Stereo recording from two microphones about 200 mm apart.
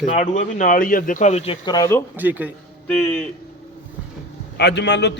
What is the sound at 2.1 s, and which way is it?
Speech, 10° right (ahead or behind).